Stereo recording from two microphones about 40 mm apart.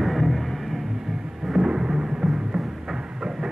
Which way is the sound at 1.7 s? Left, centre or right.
Centre.